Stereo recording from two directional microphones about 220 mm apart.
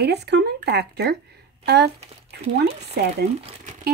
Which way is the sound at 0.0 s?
50° right (ahead or behind).